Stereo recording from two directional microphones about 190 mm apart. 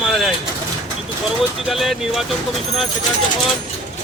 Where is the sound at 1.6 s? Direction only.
Centre (ahead or behind).